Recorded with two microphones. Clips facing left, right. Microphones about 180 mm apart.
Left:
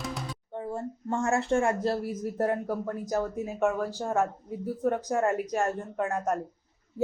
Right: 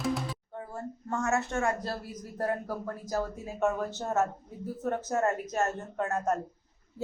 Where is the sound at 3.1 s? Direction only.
20° left (ahead or behind).